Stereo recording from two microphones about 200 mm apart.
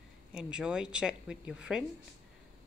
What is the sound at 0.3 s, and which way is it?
Speech, 5° right (ahead or behind).